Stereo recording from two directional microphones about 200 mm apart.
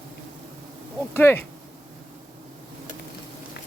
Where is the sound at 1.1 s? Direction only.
10° left (ahead or behind).